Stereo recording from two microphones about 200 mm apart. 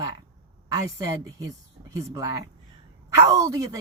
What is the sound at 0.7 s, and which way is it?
A woman's voice, 15° right (ahead or behind).